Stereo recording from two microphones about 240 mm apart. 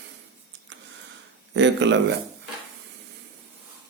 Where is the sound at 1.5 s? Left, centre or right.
Right.